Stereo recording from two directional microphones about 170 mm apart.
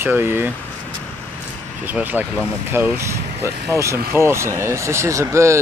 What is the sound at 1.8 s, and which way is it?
Speech, 10° right (ahead or behind).